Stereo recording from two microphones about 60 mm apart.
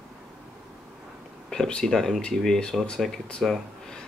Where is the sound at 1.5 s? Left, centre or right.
Centre.